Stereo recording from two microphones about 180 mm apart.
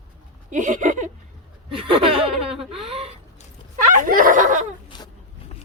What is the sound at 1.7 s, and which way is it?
Speech, 30° right (ahead or behind).